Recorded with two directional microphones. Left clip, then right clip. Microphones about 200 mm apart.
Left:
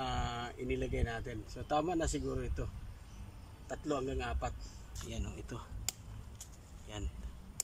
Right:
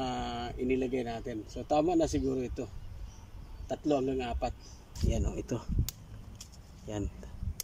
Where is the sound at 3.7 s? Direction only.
20° right (ahead or behind).